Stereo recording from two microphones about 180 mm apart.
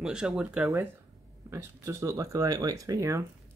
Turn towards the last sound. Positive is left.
turn(degrees=-20)  # may be behind; listen again after turning